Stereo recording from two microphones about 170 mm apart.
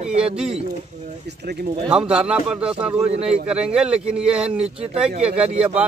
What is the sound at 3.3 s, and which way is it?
Speech, 5° right (ahead or behind).